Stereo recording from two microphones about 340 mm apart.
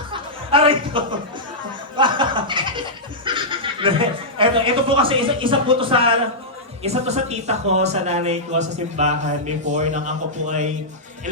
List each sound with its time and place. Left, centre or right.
0.1 s chuckle: centre
2.0 s laughter: centre
3.2 s speech: centre